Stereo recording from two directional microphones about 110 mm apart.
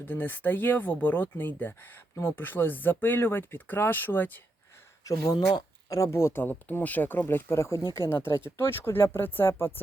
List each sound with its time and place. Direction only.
0.0 s speech: 15° left (ahead or behind)
5.0 s speech: 35° left (ahead or behind)